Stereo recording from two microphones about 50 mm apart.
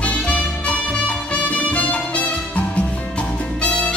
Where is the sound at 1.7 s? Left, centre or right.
Left.